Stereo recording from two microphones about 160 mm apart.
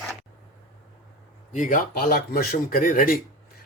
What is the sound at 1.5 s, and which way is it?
Speech, 55° left (ahead or behind).